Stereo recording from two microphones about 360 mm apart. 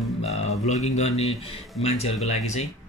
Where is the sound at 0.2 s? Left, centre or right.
Centre.